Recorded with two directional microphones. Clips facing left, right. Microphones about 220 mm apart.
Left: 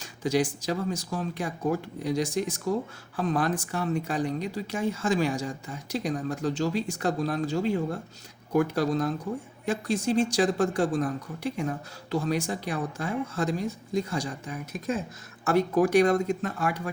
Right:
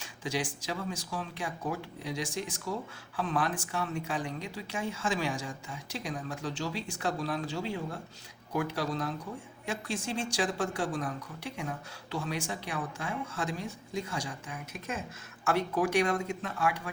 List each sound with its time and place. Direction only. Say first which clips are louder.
0.0 s speech: left 9 dB; 40° left (ahead or behind)
12.1 s speech: left 7 dB; 40° left (ahead or behind)